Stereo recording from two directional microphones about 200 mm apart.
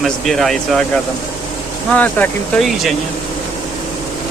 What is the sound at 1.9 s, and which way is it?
Speech, 10° left (ahead or behind).